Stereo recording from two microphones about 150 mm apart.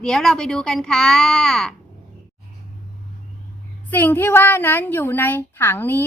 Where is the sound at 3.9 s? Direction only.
15° left (ahead or behind).